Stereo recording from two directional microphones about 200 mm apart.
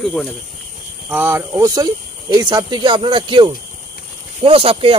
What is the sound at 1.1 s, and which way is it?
Speech, 10° right (ahead or behind).